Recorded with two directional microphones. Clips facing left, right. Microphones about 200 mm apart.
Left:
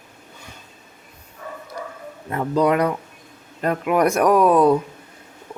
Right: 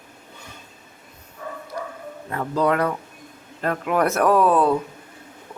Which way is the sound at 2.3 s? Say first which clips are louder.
Left 3 dB; 20° left (ahead or behind).